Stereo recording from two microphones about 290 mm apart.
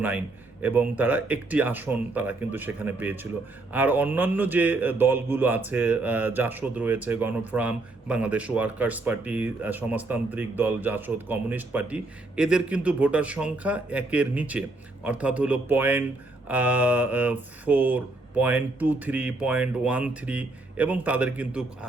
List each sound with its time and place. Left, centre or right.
0.6 s a man's voice: centre